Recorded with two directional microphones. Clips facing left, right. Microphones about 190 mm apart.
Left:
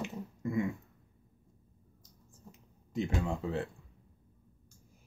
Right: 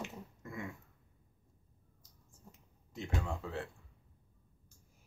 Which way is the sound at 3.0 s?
20° left (ahead or behind).